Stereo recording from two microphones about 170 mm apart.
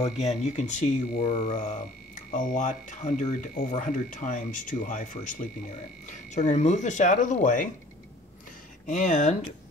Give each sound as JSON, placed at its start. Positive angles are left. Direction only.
{"t": 0.0, "sound": "speech", "side_deg": 40}
{"t": 8.8, "sound": "speech", "side_deg": 50}